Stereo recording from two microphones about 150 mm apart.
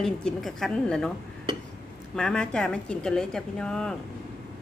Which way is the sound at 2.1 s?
5° left (ahead or behind).